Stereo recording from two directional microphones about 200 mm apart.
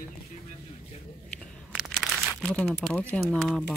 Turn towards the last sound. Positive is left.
turn(degrees=0)  # may be behind; listen again after turning